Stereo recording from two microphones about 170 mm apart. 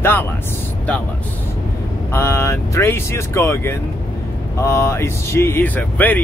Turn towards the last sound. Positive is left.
turn(degrees=10)  # may be behind; listen again after turning